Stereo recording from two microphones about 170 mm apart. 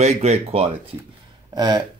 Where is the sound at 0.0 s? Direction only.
40° right (ahead or behind).